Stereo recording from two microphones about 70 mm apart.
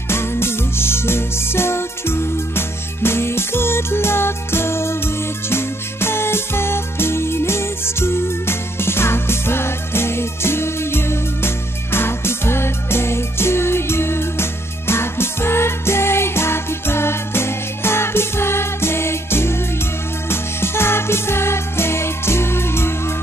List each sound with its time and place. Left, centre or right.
0.1 s music: left